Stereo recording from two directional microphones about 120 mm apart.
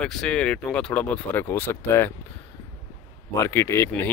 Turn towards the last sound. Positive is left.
turn(degrees=20)  # may be behind; listen again after turning